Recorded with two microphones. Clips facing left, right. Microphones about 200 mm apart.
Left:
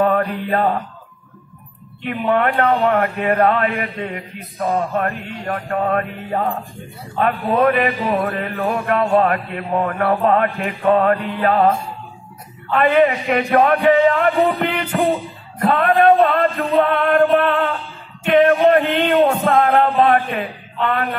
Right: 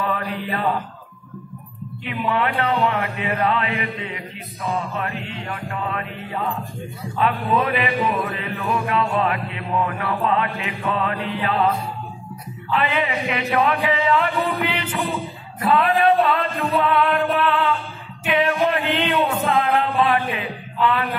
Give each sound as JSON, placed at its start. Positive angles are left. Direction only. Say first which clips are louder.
{"t": 0.0, "sound": "mantra", "louder": "left 8 dB", "side_deg": 50}
{"t": 2.0, "sound": "a man's voice", "louder": "left 5 dB", "side_deg": 50}
{"t": 15.7, "sound": "music", "louder": "left 3 dB", "side_deg": 50}
{"t": 18.3, "sound": "a sound", "louder": "left 8 dB", "side_deg": 50}